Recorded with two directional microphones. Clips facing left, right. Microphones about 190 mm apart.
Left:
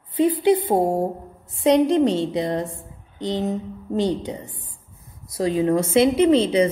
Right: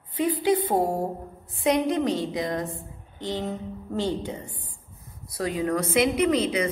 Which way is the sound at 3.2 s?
20° left (ahead or behind).